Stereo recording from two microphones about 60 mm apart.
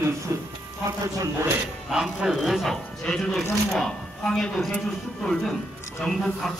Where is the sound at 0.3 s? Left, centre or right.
Right.